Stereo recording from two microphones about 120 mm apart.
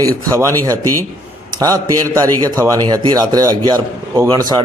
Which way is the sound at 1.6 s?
30° right (ahead or behind).